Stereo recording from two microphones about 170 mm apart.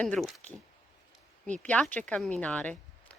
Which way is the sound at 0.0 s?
5° left (ahead or behind).